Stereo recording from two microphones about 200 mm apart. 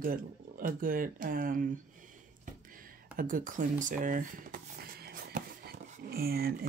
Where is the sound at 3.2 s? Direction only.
45° right (ahead or behind).